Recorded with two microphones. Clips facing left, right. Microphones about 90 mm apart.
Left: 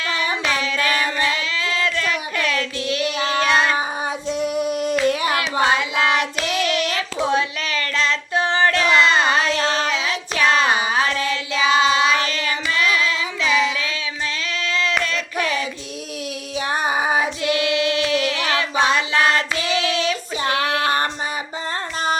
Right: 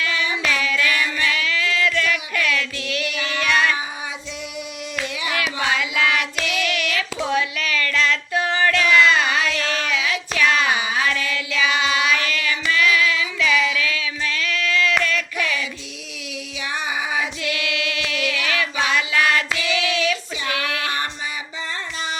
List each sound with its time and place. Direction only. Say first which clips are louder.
0.0 s child singing: left 1 dB; 40° left (ahead or behind)
0.4 s child singing: right 2 dB; 30° left (ahead or behind)
4.3 s female singing: left 11 dB; 45° left (ahead or behind)
5.5 s hands: left 4 dB; 35° left (ahead or behind)
15.4 s child singing: left 6 dB; 40° left (ahead or behind)
16.6 s female singing: left 5 dB; 45° left (ahead or behind)
20.5 s child singing: left 5 dB; 35° left (ahead or behind)